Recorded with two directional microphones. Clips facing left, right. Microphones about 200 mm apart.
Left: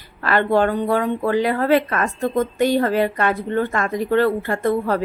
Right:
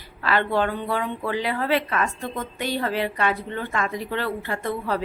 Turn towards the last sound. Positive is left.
turn(degrees=50)  # may be behind; listen again after turning